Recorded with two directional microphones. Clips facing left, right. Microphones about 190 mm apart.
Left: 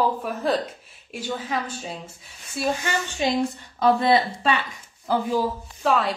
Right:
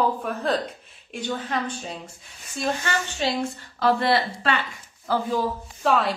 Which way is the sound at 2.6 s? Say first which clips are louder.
Left 1 dB; 10° left (ahead or behind).